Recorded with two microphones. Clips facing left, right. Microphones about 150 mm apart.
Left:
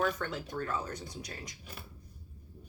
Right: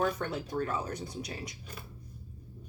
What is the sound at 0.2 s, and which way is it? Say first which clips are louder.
Speech: right 2 dB; 30° right (ahead or behind).